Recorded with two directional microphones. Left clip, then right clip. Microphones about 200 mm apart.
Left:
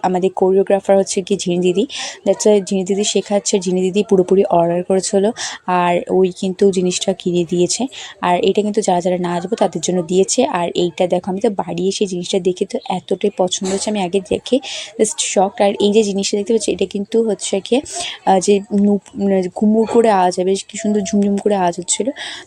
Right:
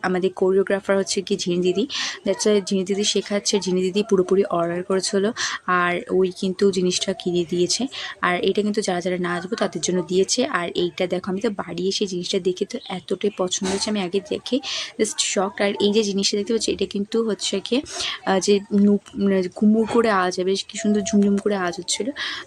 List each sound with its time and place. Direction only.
0.0 s speech: 15° left (ahead or behind)